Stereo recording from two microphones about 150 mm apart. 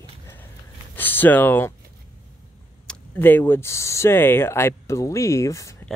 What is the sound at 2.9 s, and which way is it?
Speech, 10° left (ahead or behind).